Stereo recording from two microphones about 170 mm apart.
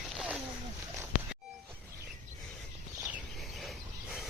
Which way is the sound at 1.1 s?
55° left (ahead or behind).